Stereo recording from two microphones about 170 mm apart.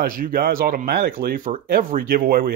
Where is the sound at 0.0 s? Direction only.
55° right (ahead or behind).